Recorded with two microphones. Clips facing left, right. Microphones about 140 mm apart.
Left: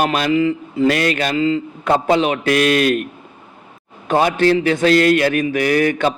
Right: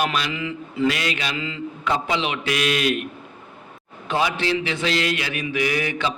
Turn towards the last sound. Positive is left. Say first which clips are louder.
# left 8 dB
turn(degrees=50)  # may be behind; listen again after turning